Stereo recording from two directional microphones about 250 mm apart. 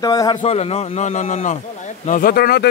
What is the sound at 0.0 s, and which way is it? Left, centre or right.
A man's voice, centre.